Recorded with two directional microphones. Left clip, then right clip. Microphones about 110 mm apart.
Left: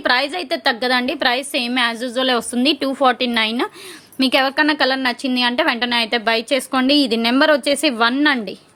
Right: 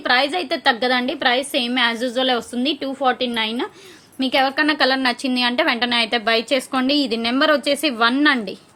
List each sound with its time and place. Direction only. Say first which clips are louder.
0.0 s a woman's voice: even; 40° left (ahead or behind)
2.9 s a woman's voice: left 3 dB; 65° left (ahead or behind)
4.2 s a woman's voice: left 2 dB; 45° left (ahead or behind)